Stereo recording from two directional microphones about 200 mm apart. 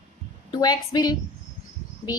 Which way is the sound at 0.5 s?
20° left (ahead or behind).